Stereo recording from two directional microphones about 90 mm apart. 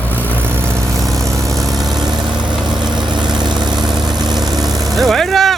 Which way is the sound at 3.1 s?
55° right (ahead or behind).